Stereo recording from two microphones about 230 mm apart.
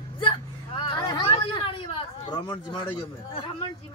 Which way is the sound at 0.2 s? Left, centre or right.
Left.